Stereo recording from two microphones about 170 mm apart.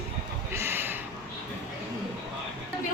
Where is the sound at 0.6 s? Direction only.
15° right (ahead or behind).